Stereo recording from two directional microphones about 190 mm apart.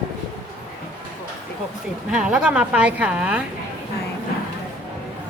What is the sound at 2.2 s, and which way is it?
Speech, 5° right (ahead or behind).